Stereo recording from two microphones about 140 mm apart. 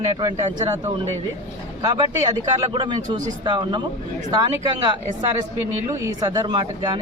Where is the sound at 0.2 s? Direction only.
30° right (ahead or behind).